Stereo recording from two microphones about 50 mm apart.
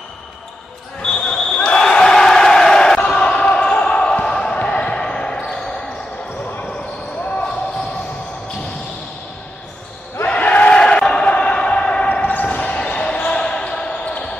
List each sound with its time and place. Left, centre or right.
1.0 s basketball bounce: centre
10.2 s battle cry: left
10.8 s a sound: centre
12.2 s basketball bounce: left